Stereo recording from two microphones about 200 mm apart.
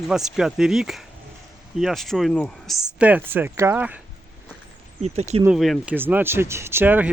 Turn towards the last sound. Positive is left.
turn(degrees=-10)  # may be behind; listen again after turning